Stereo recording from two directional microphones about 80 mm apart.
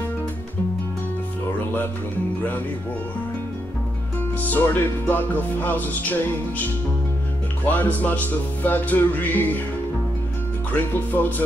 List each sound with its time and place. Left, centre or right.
4.5 s music: left
7.6 s music: left
10.7 s music: left